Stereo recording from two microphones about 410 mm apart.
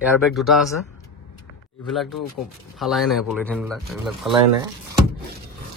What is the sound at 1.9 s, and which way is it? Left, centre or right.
A man's voice, centre.